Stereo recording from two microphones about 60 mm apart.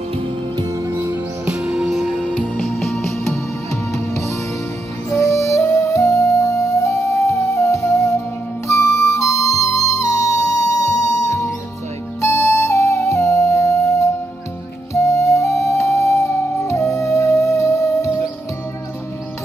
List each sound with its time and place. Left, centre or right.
1.5 s music: centre
4.1 s music: left
12.2 s music: left
15.0 s flute: left
15.7 s music: left